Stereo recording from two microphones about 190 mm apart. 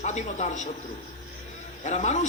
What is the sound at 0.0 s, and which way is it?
Speech, 40° left (ahead or behind).